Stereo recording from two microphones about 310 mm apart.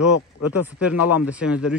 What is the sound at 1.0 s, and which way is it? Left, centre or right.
Speech, left.